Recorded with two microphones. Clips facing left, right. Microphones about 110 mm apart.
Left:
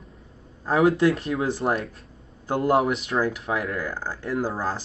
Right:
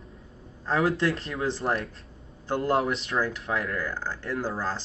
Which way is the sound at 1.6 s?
20° left (ahead or behind).